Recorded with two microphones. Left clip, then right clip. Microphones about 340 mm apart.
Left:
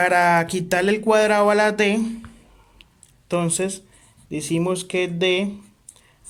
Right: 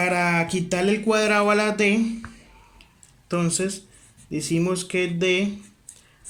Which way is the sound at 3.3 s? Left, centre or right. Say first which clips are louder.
Left 2 dB; left.